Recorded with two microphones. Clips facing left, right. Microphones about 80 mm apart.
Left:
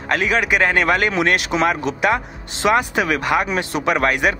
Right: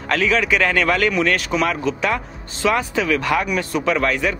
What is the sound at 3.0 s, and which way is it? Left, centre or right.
Speech, left.